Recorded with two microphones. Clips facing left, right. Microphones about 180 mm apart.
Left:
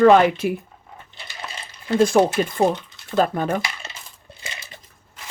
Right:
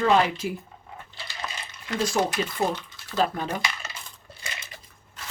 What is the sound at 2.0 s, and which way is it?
Speech, 55° left (ahead or behind).